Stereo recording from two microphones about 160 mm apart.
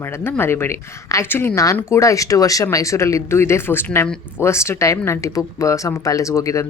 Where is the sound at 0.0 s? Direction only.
15° left (ahead or behind).